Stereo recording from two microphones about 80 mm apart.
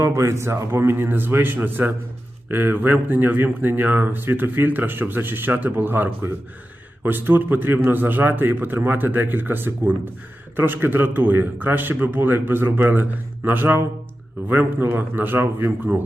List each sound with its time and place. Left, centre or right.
0.0 s speech: right